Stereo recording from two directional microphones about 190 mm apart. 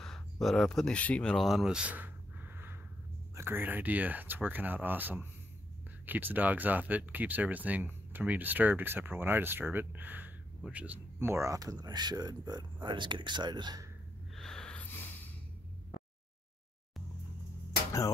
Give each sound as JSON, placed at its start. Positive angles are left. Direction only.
{"t": 0.0, "sound": "a sound", "side_deg": 0}
{"t": 3.3, "sound": "speech", "side_deg": -10}
{"t": 14.3, "sound": "snort", "side_deg": 5}